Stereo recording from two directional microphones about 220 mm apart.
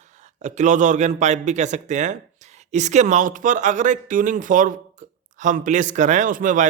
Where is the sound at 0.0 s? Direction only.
30° right (ahead or behind).